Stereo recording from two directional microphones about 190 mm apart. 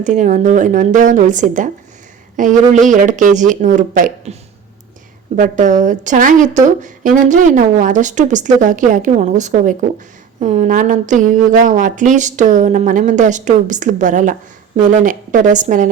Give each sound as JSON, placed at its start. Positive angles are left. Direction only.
{"t": 0.0, "sound": "speech", "side_deg": -40}
{"t": 5.4, "sound": "a woman's voice", "side_deg": -40}